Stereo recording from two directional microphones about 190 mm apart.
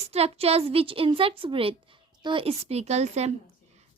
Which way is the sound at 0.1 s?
35° right (ahead or behind).